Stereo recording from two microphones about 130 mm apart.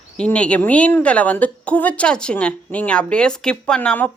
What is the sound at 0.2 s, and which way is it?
A woman's voice, 10° left (ahead or behind).